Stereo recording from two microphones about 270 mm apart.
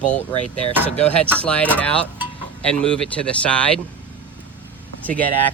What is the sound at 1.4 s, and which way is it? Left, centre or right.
Speech, centre.